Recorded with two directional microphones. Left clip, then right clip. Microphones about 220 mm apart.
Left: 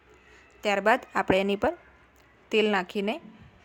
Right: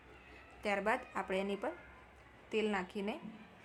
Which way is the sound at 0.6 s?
35° left (ahead or behind).